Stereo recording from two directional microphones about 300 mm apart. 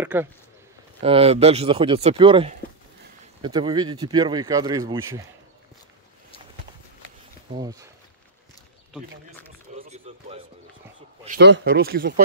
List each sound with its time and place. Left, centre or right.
0.0 s speech: centre
1.0 s speech: centre
7.5 s speech: centre
9.8 s a sound: right
11.2 s speech: right